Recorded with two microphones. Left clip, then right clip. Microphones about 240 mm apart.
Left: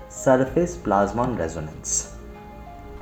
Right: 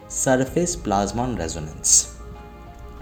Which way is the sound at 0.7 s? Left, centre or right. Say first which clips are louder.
Left 1 dB; right.